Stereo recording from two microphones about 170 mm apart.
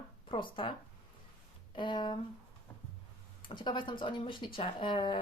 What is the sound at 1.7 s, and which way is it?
Speech, 30° left (ahead or behind).